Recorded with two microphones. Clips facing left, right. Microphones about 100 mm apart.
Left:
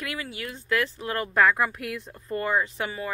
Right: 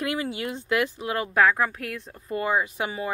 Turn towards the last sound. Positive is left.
turn(degrees=-15)  # may be behind; listen again after turning